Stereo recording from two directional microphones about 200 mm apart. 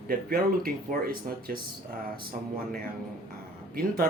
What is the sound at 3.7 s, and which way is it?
Speech, 45° right (ahead or behind).